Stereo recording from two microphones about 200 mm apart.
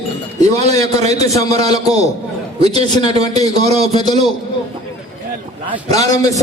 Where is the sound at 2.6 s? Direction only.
30° right (ahead or behind).